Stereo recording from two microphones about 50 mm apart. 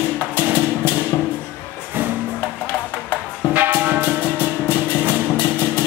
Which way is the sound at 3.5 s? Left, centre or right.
Right.